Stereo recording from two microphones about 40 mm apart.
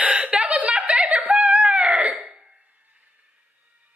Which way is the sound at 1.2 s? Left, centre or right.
Right.